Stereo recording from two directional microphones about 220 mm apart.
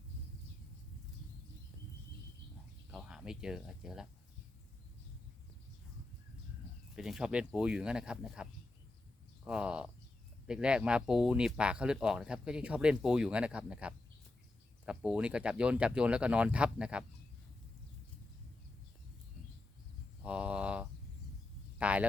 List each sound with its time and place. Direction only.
2.9 s speech: centre (ahead or behind)
6.9 s speech: centre (ahead or behind)
20.2 s a sound: 5° right (ahead or behind)
21.8 s speech: 5° right (ahead or behind)